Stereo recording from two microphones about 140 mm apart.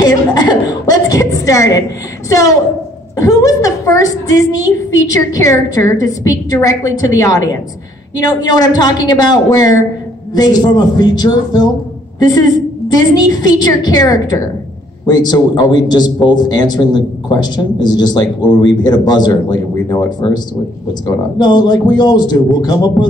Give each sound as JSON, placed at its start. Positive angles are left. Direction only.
{"t": 0.0, "sound": "a woman's voice", "side_deg": 25}
{"t": 12.9, "sound": "a woman's voice", "side_deg": 30}